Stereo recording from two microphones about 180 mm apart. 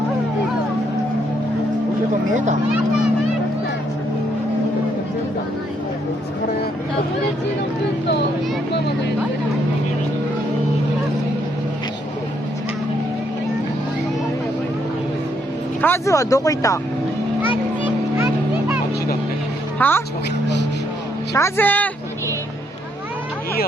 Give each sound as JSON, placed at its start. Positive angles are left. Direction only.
{"t": 15.8, "sound": "speech", "side_deg": 15}
{"t": 19.8, "sound": "speech", "side_deg": 10}
{"t": 21.3, "sound": "speech", "side_deg": 15}